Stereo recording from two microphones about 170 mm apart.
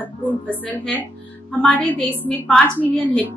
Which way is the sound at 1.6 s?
10° left (ahead or behind).